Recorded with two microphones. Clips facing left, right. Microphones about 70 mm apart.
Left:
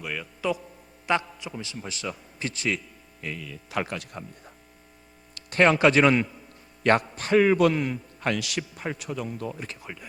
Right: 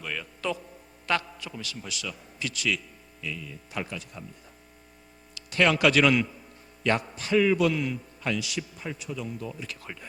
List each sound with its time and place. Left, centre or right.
0.0 s a man's voice: centre; by 3.4 s left
3.4 s speech: left
5.3 s a sound: left
5.7 s a man's voice: left
6.8 s a man's voice: left
9.8 s speech: centre